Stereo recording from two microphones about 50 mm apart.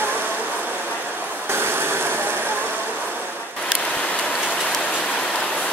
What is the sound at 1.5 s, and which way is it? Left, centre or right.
Vehicle, right.